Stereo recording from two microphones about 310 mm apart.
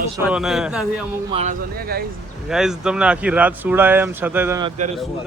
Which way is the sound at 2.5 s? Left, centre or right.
Centre.